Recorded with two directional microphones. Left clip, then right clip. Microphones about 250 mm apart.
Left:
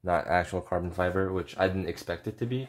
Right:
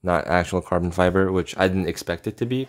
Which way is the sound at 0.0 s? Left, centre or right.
Right.